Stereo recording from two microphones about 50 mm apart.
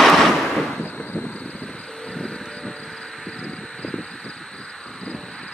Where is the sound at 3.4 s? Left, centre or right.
Centre.